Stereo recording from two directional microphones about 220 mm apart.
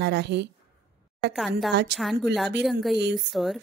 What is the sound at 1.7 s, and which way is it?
Speech, 50° right (ahead or behind).